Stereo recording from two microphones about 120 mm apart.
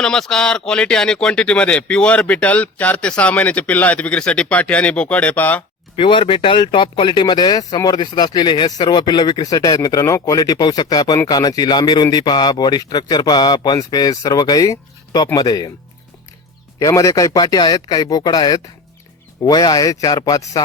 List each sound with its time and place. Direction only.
0.0 s speech: 5° left (ahead or behind)
6.0 s speech: 45° left (ahead or behind)
16.8 s speech: 25° left (ahead or behind)